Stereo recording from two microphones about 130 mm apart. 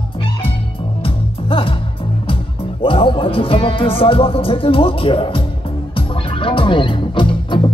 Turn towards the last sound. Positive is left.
turn(degrees=40)  # may be behind; listen again after turning